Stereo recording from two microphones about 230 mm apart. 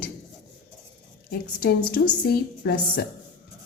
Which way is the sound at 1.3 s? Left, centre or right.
Left.